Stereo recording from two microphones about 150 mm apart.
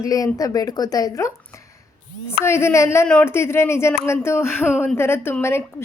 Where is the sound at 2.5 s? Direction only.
15° left (ahead or behind).